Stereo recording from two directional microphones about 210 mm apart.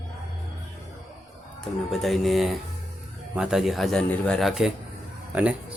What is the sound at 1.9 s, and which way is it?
A man's voice, centre (ahead or behind).